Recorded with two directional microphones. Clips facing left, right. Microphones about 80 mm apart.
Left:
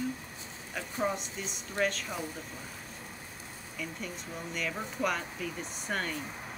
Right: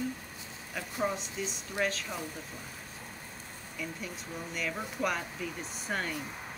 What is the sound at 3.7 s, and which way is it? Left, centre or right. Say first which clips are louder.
Speech: even; centre.